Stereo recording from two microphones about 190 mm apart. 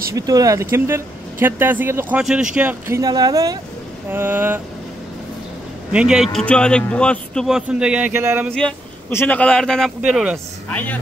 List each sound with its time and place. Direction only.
0.1 s speech: 20° right (ahead or behind)
3.0 s speech: 20° right (ahead or behind)
5.9 s a man's voice: 5° right (ahead or behind)
8.5 s a man's voice: 10° left (ahead or behind)